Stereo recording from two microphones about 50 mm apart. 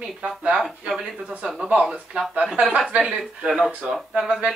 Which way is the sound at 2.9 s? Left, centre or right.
Centre.